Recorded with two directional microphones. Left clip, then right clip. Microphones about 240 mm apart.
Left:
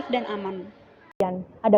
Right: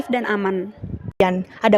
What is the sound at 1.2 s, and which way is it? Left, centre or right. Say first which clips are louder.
Speech: right 6 dB; right.